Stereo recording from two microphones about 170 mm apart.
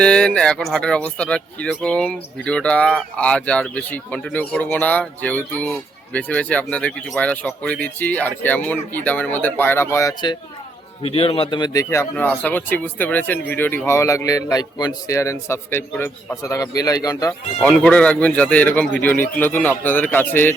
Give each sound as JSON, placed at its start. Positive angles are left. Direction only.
{"t": 0.0, "sound": "speech", "side_deg": 5}
{"t": 11.0, "sound": "speech", "side_deg": 35}
{"t": 17.6, "sound": "speech", "side_deg": 5}